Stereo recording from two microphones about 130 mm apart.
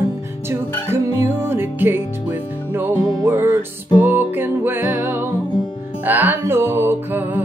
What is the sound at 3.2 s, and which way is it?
Music, 15° right (ahead or behind).